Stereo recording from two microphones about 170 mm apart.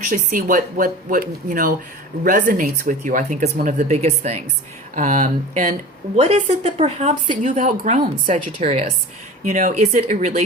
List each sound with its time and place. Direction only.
0.0 s speech: 50° right (ahead or behind)
6.1 s a woman's voice: 35° right (ahead or behind)
9.5 s speech: 50° right (ahead or behind)